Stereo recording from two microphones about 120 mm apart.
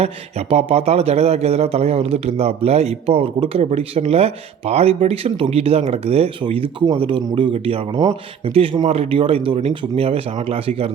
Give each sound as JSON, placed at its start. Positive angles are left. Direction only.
{"t": 0.0, "sound": "speech", "side_deg": -60}
{"t": 6.4, "sound": "speech", "side_deg": -45}
{"t": 7.9, "sound": "speech", "side_deg": -35}
{"t": 8.9, "sound": "speech", "side_deg": -55}